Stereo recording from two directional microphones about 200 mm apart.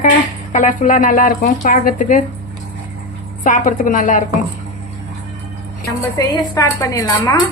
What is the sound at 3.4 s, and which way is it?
Speech, 40° left (ahead or behind).